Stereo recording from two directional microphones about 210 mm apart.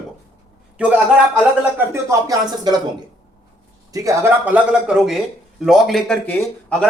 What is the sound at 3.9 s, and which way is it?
Speech, 15° right (ahead or behind).